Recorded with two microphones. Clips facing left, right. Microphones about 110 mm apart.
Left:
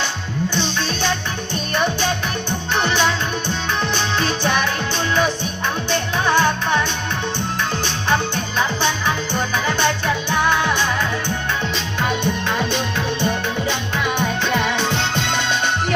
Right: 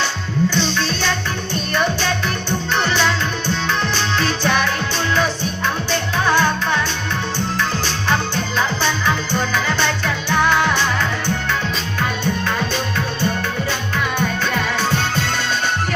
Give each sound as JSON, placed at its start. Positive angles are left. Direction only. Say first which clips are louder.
{"t": 2.8, "sound": "music", "louder": "left 1 dB", "side_deg": 15}
{"t": 5.9, "sound": "music", "louder": "even", "side_deg": 20}
{"t": 8.1, "sound": "music", "louder": "even", "side_deg": 15}
{"t": 12.2, "sound": "music", "louder": "even", "side_deg": 20}
{"t": 14.8, "sound": "music", "louder": "right 1 dB", "side_deg": 20}